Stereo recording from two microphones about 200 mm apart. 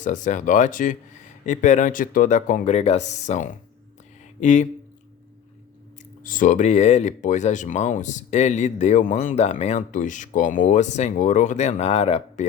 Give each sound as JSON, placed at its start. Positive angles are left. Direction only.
{"t": 0.0, "sound": "speech", "side_deg": 40}
{"t": 6.2, "sound": "speech", "side_deg": 40}